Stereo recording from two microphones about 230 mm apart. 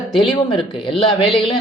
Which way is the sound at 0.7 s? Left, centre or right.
Left.